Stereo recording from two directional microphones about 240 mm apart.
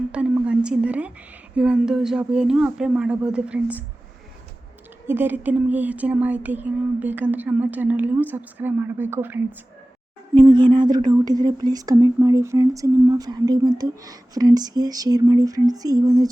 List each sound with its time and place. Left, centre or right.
0.1 s speech: centre
5.0 s speech: centre
10.5 s speech: centre